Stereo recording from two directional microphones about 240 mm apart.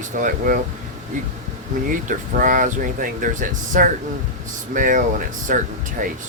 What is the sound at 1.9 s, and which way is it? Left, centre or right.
Speech, right.